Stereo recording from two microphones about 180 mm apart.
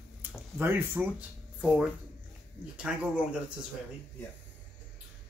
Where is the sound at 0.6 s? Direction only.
10° right (ahead or behind).